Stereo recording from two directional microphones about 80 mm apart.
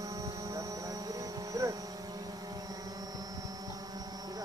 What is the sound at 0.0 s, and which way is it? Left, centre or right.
Mains hum, right.